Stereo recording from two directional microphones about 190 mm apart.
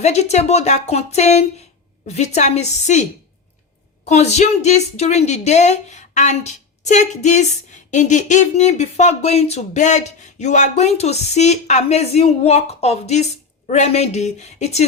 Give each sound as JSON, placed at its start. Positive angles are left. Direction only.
{"t": 0.0, "sound": "a woman's voice", "side_deg": 35}